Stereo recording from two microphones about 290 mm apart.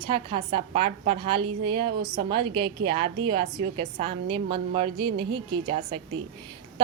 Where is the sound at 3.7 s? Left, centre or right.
Centre.